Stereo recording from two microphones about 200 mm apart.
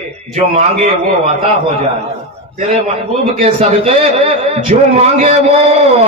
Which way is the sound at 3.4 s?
30° right (ahead or behind).